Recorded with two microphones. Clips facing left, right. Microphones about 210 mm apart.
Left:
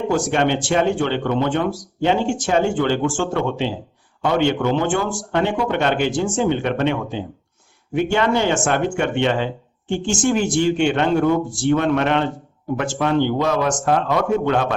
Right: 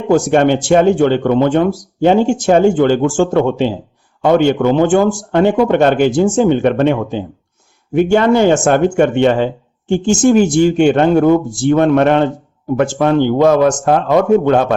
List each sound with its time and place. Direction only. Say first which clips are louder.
0.1 s speech: right 10 dB; 45° right (ahead or behind)